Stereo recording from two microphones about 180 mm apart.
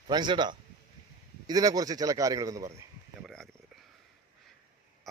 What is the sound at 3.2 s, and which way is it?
Speech, centre (ahead or behind).